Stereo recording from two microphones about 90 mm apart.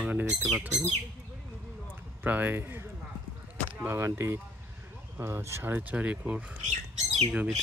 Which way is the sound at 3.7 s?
25° right (ahead or behind).